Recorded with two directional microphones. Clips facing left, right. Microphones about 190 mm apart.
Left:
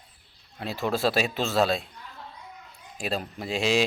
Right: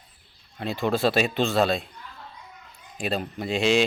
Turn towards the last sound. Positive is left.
turn(degrees=0)  # may be behind; listen again after turning